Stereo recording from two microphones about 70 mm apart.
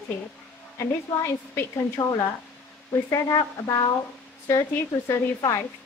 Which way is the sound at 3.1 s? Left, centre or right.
Left.